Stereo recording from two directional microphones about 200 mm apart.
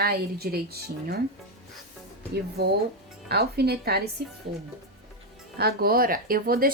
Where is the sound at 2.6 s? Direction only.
55° right (ahead or behind).